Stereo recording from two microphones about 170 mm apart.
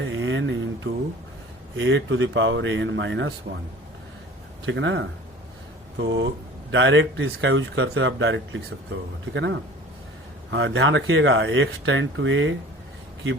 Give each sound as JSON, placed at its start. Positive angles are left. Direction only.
{"t": 0.0, "sound": "a sound", "side_deg": -90}
{"t": 0.9, "sound": "speech", "side_deg": -70}
{"t": 1.7, "sound": "speech", "side_deg": -90}
{"t": 4.6, "sound": "speech", "side_deg": -90}